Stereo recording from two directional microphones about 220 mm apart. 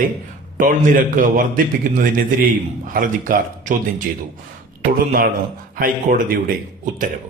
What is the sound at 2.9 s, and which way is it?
A man's voice, 40° right (ahead or behind).